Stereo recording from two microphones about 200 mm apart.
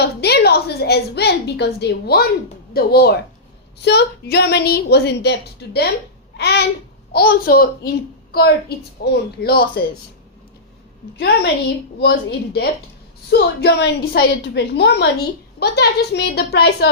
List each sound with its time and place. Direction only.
0.0 s a woman's voice: 55° left (ahead or behind)
6.3 s babbling: 55° left (ahead or behind)
7.1 s a woman's voice: 50° left (ahead or behind)
11.2 s a woman's voice: 55° left (ahead or behind)